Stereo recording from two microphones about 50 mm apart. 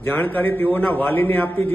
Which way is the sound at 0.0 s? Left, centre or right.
Left.